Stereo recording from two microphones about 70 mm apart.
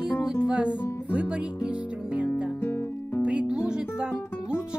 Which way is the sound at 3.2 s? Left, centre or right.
Centre.